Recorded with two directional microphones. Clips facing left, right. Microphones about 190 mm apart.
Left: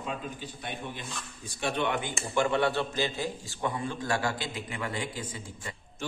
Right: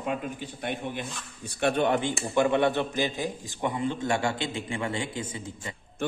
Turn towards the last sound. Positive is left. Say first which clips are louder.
# right 3 dB
turn(degrees=-25)  # may be behind; listen again after turning